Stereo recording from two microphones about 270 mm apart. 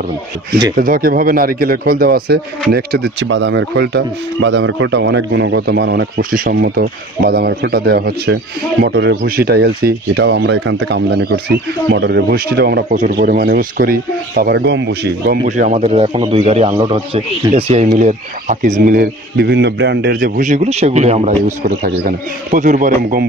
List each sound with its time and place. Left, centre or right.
0.7 s speech: right